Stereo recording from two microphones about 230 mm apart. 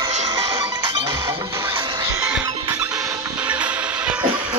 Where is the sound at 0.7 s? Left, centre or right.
Centre.